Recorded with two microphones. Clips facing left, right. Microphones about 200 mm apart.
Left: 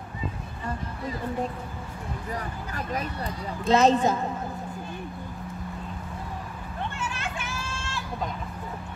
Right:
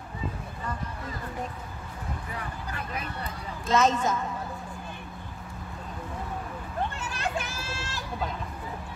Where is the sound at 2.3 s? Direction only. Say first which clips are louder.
Left 4 dB; 40° left (ahead or behind).